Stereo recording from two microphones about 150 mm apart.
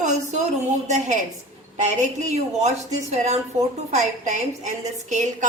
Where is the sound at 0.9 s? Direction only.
50° right (ahead or behind).